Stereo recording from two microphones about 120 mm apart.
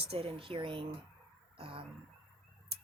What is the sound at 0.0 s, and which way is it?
Speech, 55° right (ahead or behind).